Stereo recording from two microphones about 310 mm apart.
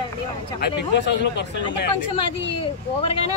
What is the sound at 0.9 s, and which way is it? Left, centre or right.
Speech, left.